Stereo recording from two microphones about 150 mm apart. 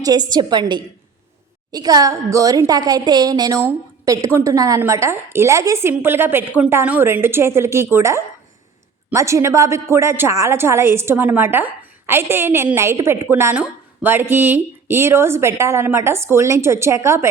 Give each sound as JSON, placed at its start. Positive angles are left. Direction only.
{"t": 0.0, "sound": "a woman's voice", "side_deg": -25}